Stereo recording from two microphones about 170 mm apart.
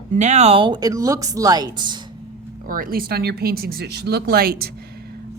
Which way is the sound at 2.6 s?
55° right (ahead or behind).